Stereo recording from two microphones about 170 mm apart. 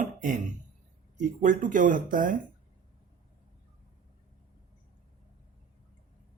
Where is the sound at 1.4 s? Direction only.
50° right (ahead or behind).